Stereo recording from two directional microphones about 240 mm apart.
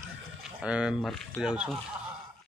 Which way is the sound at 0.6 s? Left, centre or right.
Centre.